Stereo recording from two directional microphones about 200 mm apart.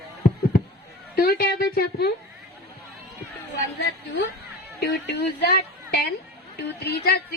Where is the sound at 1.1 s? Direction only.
50° left (ahead or behind).